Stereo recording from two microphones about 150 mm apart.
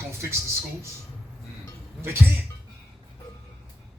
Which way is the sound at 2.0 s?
15° right (ahead or behind).